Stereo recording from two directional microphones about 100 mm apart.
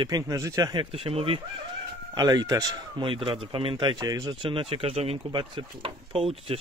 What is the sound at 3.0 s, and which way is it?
A man's voice, 55° right (ahead or behind).